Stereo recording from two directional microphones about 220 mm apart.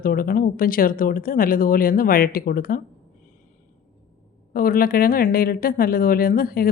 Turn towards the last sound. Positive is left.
turn(degrees=40)  # may be behind; listen again after turning